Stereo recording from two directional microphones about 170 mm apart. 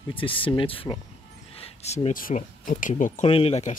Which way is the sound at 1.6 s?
40° left (ahead or behind).